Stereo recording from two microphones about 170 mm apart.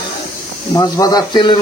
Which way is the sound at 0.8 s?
20° left (ahead or behind).